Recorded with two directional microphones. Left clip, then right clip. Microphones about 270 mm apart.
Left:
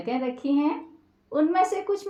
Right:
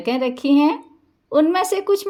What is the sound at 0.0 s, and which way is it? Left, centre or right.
A woman's voice, right.